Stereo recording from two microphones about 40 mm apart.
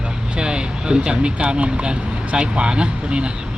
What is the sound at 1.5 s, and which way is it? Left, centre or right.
Speech, right.